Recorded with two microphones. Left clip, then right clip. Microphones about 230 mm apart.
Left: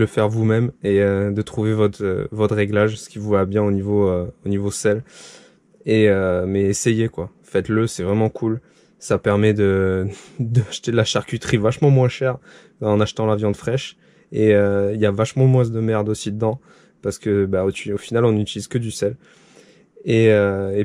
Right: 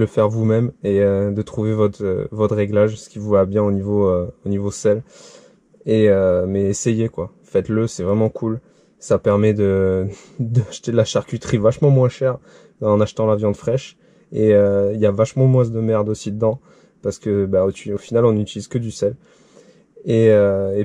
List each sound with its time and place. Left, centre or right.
0.1 s speech: left
20.1 s speech: left